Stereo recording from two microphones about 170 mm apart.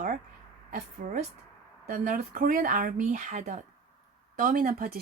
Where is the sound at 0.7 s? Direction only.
45° right (ahead or behind).